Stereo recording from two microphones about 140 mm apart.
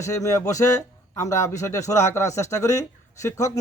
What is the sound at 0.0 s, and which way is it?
A man's voice, 20° left (ahead or behind).